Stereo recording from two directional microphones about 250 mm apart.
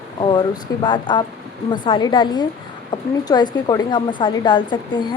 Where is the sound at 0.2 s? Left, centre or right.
Centre.